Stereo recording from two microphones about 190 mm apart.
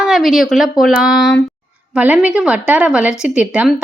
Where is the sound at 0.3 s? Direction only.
Centre (ahead or behind).